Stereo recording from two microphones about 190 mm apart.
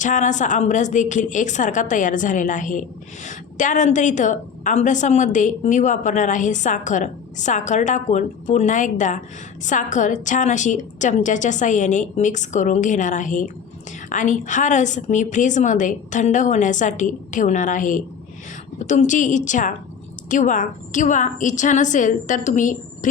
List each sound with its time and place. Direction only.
0.0 s a woman's voice: 40° left (ahead or behind)